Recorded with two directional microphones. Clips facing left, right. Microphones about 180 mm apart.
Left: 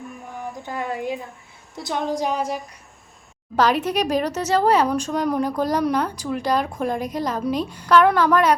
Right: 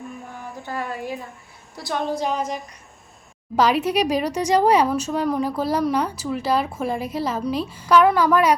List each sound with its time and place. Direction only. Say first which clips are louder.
0.6 s a woman's voice: left 1 dB; 15° left (ahead or behind)
3.5 s speech: right 1 dB; 10° right (ahead or behind)